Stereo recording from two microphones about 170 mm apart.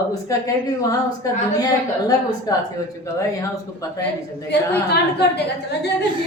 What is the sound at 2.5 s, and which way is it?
Speech, 20° left (ahead or behind).